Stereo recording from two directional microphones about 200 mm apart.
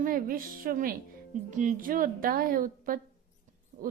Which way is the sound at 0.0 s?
45° right (ahead or behind).